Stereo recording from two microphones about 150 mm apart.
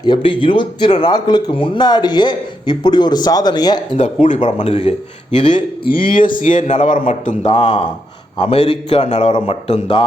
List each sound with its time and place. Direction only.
0.0 s speech: 35° left (ahead or behind)
4.0 s a man's voice: 55° left (ahead or behind); by 5.5 s 35° left (ahead or behind)
6.0 s speech: 65° left (ahead or behind)
6.4 s a man's voice: 55° left (ahead or behind)
7.4 s a man's voice: 35° left (ahead or behind)